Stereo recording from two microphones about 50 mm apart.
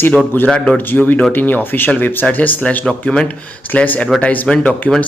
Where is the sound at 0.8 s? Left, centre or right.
Left.